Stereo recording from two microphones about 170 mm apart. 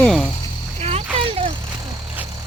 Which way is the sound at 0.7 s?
35° right (ahead or behind).